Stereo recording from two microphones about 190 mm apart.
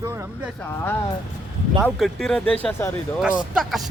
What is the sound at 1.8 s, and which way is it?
Speech, centre (ahead or behind).